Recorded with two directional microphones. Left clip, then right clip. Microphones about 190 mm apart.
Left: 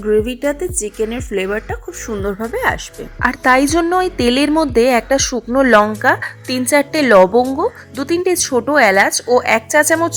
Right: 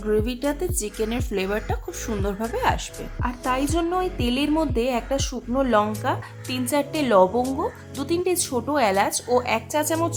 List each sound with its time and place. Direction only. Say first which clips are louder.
0.0 s a woman's voice: left 8 dB; 15° left (ahead or behind)
3.2 s a woman's voice: left 13 dB; 30° left (ahead or behind)